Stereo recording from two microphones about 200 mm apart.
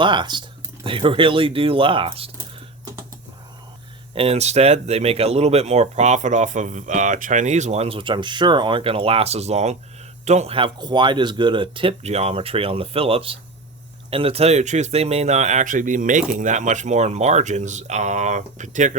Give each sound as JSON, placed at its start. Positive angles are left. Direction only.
{"t": 0.0, "sound": "speech", "side_deg": -25}
{"t": 4.1, "sound": "speech", "side_deg": -30}